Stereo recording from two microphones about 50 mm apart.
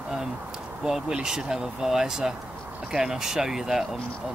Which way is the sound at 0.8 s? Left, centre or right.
Centre.